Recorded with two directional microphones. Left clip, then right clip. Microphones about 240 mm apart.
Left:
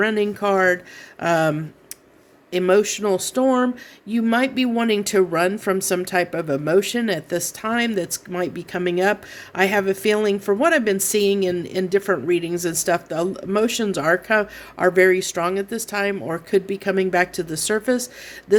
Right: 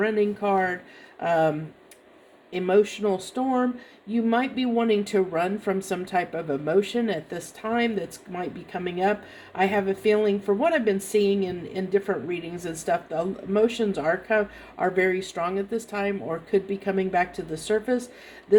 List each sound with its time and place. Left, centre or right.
0.0 s a woman's voice: left